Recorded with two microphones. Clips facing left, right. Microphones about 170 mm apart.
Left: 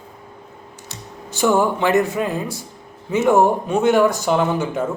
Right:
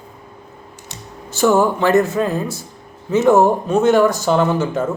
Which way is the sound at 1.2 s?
15° left (ahead or behind).